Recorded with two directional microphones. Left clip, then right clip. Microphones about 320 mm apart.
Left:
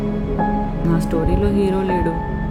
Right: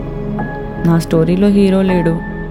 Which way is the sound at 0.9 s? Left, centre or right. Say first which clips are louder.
Right 7 dB; right.